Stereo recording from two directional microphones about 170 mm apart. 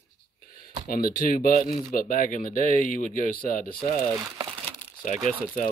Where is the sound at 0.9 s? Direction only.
55° left (ahead or behind).